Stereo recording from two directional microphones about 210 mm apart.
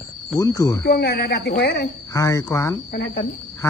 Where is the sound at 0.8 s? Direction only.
50° left (ahead or behind).